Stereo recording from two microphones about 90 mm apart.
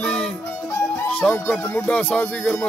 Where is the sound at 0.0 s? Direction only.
10° left (ahead or behind).